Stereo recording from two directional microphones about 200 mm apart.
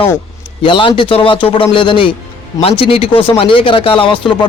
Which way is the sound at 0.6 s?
25° left (ahead or behind).